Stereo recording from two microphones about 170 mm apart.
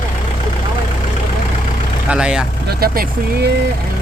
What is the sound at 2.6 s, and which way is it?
Speech, 60° right (ahead or behind).